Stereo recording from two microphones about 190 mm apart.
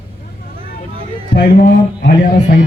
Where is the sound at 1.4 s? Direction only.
45° left (ahead or behind).